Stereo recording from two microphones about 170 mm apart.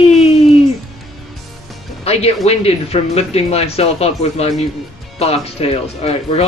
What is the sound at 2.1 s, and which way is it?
Music, 35° left (ahead or behind).